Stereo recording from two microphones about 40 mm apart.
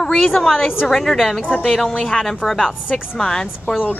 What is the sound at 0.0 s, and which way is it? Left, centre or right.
A woman's voice, centre.